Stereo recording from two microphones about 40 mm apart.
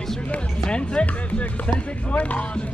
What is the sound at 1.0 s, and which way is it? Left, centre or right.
Music, left.